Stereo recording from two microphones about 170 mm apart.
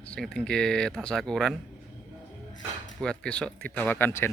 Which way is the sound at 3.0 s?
5° left (ahead or behind).